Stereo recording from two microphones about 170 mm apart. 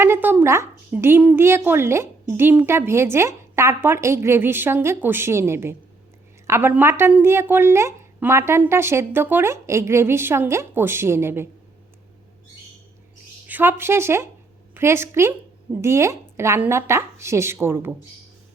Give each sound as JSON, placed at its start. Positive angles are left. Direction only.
{"t": 0.0, "sound": "a woman's voice", "side_deg": -15}
{"t": 13.5, "sound": "a woman's voice", "side_deg": -15}